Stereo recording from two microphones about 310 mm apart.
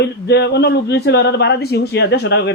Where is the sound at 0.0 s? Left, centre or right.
Left.